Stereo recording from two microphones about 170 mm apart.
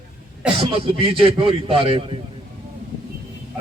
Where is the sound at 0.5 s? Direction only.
35° right (ahead or behind).